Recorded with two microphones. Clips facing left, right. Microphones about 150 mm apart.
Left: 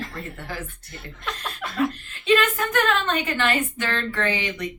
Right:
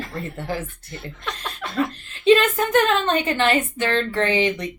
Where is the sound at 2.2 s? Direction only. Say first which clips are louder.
Right 5 dB; 25° right (ahead or behind).